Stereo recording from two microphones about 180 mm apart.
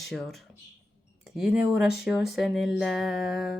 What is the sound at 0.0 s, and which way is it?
Speech, centre (ahead or behind).